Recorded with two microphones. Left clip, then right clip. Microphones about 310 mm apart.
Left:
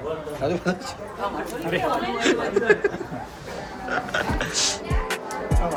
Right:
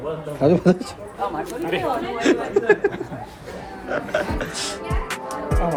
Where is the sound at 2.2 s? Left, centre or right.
Centre.